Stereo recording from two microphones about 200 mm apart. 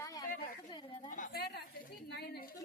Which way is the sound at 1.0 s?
40° left (ahead or behind).